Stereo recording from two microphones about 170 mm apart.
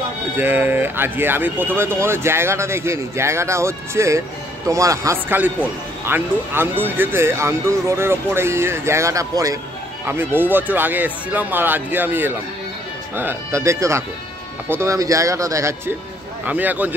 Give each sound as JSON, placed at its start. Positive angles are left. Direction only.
{"t": 0.4, "sound": "speech", "side_deg": -10}